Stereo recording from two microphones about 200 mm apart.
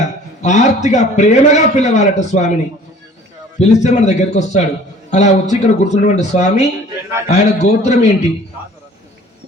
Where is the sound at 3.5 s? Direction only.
35° left (ahead or behind).